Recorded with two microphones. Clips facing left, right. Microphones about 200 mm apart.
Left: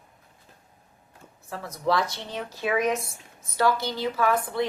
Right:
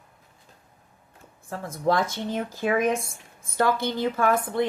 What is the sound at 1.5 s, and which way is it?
A woman's voice, 50° right (ahead or behind).